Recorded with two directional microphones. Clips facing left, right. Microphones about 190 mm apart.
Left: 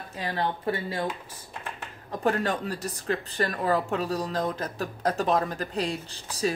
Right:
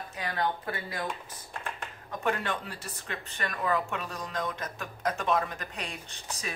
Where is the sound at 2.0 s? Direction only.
35° left (ahead or behind).